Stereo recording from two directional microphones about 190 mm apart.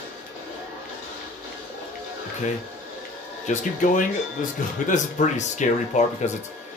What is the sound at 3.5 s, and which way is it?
Speech, 40° left (ahead or behind).